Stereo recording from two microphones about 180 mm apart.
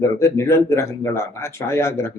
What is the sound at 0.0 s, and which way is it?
Speech, 15° left (ahead or behind).